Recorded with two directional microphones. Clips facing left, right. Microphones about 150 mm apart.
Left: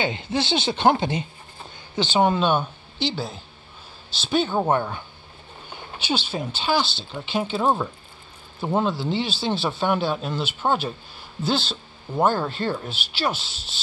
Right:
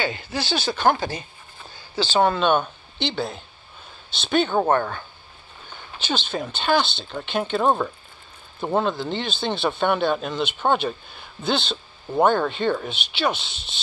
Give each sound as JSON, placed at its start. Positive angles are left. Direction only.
{"t": 0.0, "sound": "speech", "side_deg": 25}